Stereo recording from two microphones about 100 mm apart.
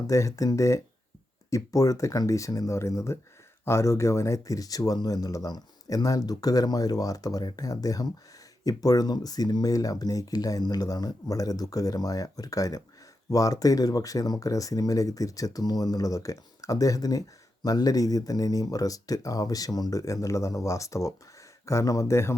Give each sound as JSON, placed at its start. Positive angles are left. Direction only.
{"t": 0.1, "sound": "speech", "side_deg": 35}